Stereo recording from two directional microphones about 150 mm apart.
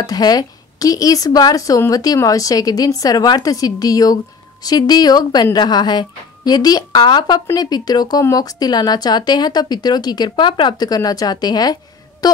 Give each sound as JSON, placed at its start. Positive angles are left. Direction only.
{"t": 0.0, "sound": "speech", "side_deg": 25}